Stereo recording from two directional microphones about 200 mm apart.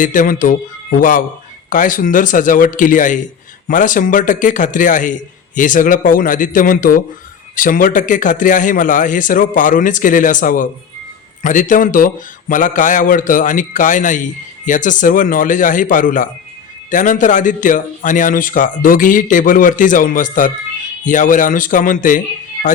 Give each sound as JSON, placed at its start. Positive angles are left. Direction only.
{"t": 0.0, "sound": "a man's voice", "side_deg": 40}